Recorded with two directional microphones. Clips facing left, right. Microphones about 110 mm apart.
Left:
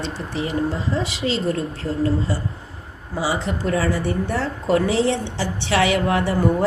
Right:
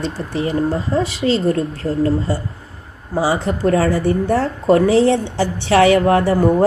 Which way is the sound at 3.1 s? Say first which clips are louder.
Right 5 dB; 45° right (ahead or behind).